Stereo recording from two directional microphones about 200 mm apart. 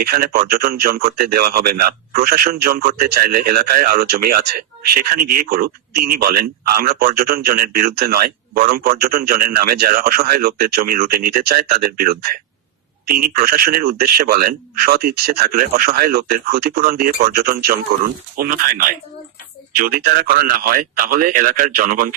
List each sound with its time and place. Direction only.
0.0 s speech: 50° right (ahead or behind)